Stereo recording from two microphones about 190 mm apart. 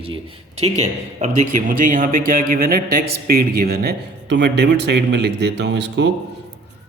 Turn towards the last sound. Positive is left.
turn(degrees=-65)  # may be behind; listen again after turning